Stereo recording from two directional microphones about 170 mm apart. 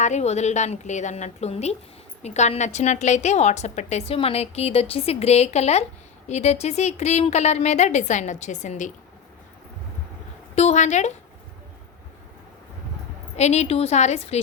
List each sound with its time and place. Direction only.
0.0 s a woman's voice: 40° left (ahead or behind)
10.5 s a woman's voice: 40° left (ahead or behind)
13.3 s a woman's voice: 40° left (ahead or behind)